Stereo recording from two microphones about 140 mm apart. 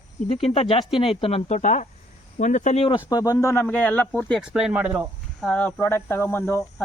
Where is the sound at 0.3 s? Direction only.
45° left (ahead or behind).